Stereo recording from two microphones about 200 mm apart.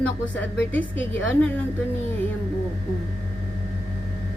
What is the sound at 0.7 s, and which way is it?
Speech, 10° left (ahead or behind).